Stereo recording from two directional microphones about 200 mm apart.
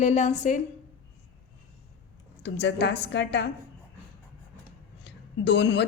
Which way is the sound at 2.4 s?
60° left (ahead or behind).